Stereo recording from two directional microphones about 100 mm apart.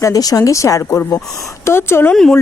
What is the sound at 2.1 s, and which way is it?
Speech, 5° left (ahead or behind).